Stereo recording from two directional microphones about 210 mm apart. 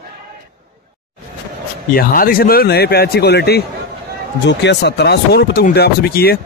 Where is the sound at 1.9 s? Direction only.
45° left (ahead or behind).